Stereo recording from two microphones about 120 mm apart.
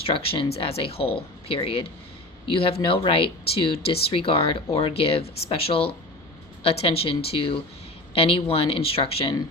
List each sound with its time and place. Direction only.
0.0 s speech: 50° left (ahead or behind)